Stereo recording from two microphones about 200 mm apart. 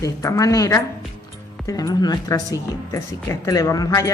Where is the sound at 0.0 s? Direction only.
15° left (ahead or behind).